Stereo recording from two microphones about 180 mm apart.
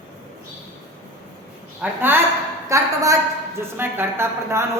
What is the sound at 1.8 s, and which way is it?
A woman's voice, 10° right (ahead or behind).